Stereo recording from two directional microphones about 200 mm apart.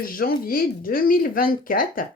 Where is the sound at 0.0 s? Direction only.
45° left (ahead or behind).